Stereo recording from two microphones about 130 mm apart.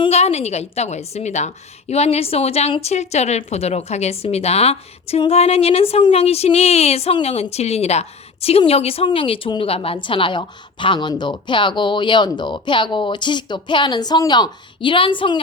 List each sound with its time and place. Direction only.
0.1 s a woman's voice: 55° left (ahead or behind)